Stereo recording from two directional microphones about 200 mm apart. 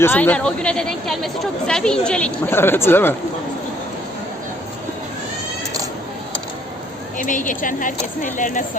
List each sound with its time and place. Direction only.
0.0 s a woman's voice: 10° left (ahead or behind)
7.2 s speech: 40° left (ahead or behind)